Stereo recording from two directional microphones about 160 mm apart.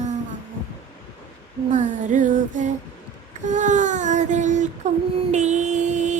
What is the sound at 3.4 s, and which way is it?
Child singing, 50° right (ahead or behind).